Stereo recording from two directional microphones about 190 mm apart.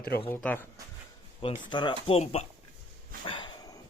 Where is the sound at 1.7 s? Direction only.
25° left (ahead or behind).